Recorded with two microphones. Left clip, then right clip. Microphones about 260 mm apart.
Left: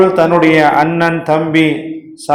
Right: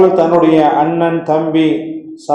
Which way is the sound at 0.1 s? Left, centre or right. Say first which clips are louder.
Even; left.